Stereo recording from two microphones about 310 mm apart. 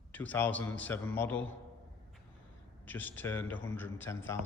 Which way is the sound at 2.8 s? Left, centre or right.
Centre.